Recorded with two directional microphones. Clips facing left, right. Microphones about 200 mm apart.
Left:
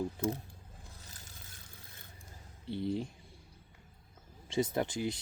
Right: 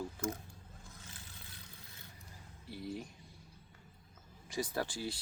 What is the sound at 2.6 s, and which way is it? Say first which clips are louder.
Speech: left 8 dB; 25° left (ahead or behind).